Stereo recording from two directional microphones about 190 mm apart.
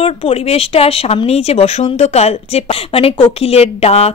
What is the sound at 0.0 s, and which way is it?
Speech, 30° left (ahead or behind).